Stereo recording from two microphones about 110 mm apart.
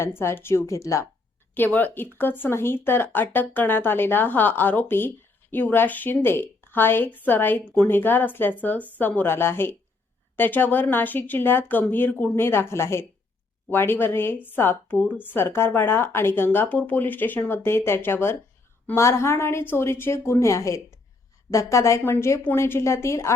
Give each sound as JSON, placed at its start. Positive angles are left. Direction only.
{"t": 0.0, "sound": "speech", "side_deg": 20}
{"t": 1.5, "sound": "speech", "side_deg": 15}